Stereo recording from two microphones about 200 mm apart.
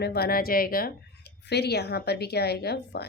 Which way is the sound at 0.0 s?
50° left (ahead or behind).